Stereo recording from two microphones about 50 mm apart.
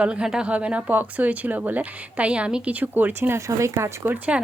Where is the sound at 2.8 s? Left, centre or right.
Right.